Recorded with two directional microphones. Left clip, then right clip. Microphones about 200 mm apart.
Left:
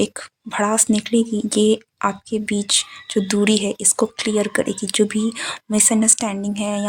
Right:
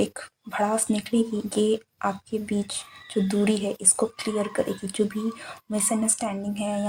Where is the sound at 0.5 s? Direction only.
35° left (ahead or behind).